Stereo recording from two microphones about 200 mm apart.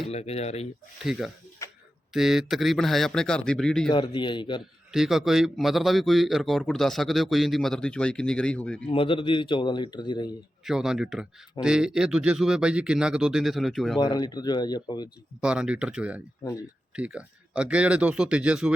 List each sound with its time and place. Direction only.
0.1 s speech: 30° left (ahead or behind)
1.0 s a man's voice: 5° right (ahead or behind)
1.6 s a sound: 15° left (ahead or behind)
2.1 s a man's voice: centre (ahead or behind)
3.8 s speech: 25° left (ahead or behind)
4.9 s a man's voice: centre (ahead or behind)
8.9 s speech: 25° left (ahead or behind)
10.7 s a man's voice: centre (ahead or behind)
14.0 s speech: 20° left (ahead or behind)
15.4 s a man's voice: 5° right (ahead or behind)